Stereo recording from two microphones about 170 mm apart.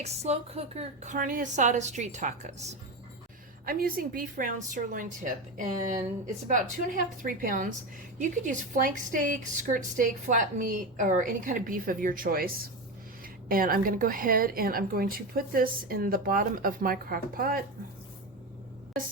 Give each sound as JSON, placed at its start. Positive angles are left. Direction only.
{"t": 0.0, "sound": "a woman's voice", "side_deg": -40}
{"t": 3.7, "sound": "a woman's voice", "side_deg": -60}